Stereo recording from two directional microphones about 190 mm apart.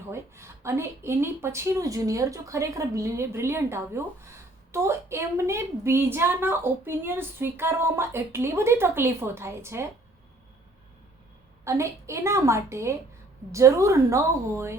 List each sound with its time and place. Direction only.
0.1 s speech: 15° right (ahead or behind)
11.6 s speech: 15° right (ahead or behind)